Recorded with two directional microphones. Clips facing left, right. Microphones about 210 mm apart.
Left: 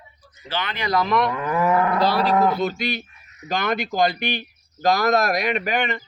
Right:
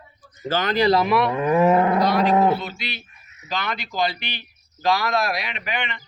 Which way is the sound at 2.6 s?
45° left (ahead or behind).